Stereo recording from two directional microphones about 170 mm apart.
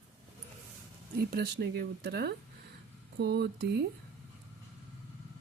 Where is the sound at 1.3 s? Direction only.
65° right (ahead or behind).